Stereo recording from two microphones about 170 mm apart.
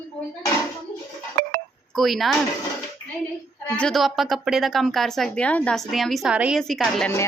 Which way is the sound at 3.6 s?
5° left (ahead or behind).